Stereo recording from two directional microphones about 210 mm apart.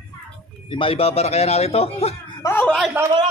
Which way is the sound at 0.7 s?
25° left (ahead or behind).